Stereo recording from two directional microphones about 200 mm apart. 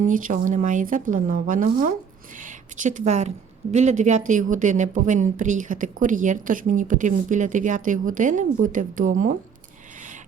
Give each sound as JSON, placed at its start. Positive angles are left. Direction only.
{"t": 0.0, "sound": "speech", "side_deg": -40}